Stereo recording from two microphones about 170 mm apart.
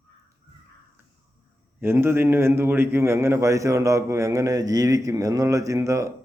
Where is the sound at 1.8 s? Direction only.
15° right (ahead or behind).